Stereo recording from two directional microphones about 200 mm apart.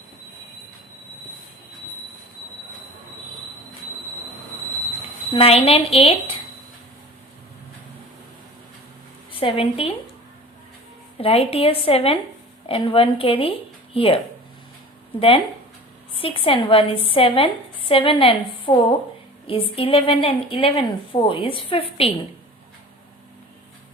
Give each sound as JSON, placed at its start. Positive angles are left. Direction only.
{"t": 5.3, "sound": "a woman's voice", "side_deg": 30}
{"t": 9.3, "sound": "a woman's voice", "side_deg": 25}
{"t": 11.2, "sound": "a woman's voice", "side_deg": 30}
{"t": 16.1, "sound": "a woman's voice", "side_deg": 25}